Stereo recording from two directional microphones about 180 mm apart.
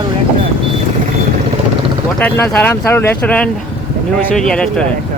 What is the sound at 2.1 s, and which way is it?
Speech, 10° left (ahead or behind).